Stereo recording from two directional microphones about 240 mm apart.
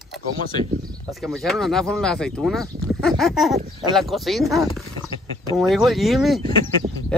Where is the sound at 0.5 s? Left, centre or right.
Centre.